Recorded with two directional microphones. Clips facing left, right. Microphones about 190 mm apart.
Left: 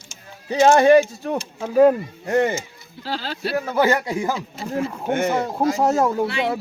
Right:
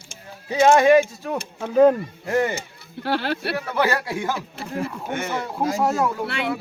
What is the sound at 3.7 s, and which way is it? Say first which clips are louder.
A man's voice: left 3 dB; 20° left (ahead or behind).